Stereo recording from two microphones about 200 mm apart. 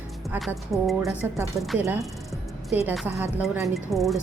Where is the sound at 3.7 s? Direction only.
Centre (ahead or behind).